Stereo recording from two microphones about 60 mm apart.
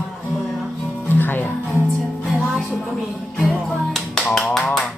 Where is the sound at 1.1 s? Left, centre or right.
Left.